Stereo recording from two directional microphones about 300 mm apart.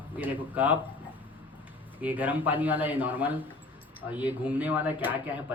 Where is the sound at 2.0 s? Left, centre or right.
Centre.